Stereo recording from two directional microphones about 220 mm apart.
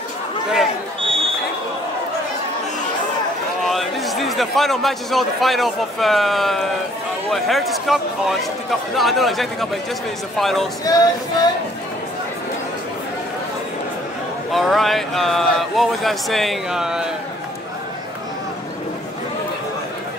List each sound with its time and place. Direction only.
3.6 s a man's voice: centre (ahead or behind)
10.9 s male singing: 15° left (ahead or behind)
14.5 s speech: centre (ahead or behind)